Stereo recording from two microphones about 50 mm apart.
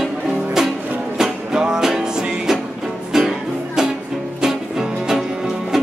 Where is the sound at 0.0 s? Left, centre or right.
Centre.